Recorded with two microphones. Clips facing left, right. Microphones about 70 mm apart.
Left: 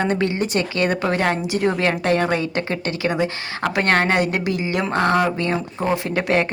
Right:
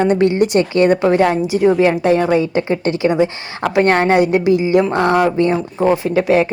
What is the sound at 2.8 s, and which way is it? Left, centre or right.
Speech, right.